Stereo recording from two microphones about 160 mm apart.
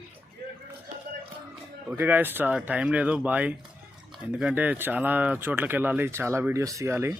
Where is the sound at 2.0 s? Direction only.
10° right (ahead or behind).